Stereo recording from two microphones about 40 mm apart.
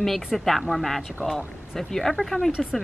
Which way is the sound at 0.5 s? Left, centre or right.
Centre.